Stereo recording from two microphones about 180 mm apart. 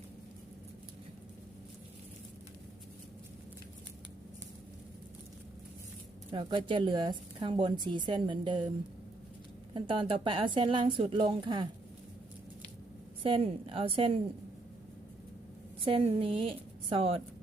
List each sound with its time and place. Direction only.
6.3 s a woman's voice: 30° right (ahead or behind)
9.7 s a woman's voice: 30° right (ahead or behind)
13.2 s a woman's voice: 30° right (ahead or behind)
15.8 s a woman's voice: 30° right (ahead or behind)